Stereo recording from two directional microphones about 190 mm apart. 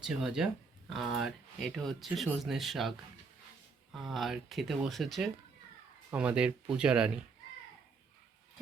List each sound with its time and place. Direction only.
0.0 s speech: centre (ahead or behind)
3.9 s speech: centre (ahead or behind)